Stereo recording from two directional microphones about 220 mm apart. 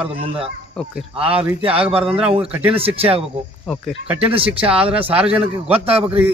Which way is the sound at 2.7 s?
25° right (ahead or behind).